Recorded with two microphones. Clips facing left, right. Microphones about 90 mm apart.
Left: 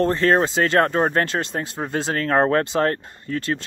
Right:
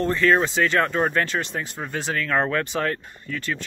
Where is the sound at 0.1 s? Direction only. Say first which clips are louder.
Left 1 dB; 35° left (ahead or behind).